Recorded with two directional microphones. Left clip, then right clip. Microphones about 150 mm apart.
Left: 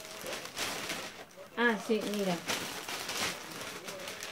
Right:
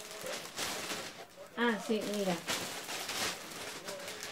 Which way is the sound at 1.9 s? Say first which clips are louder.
Left 3 dB; 20° left (ahead or behind).